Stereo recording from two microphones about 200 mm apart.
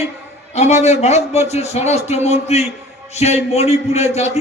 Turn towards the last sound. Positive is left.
turn(degrees=35)  # may be behind; listen again after turning